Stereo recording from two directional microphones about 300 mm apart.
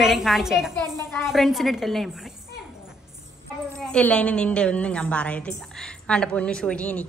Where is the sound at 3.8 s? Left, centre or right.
Centre.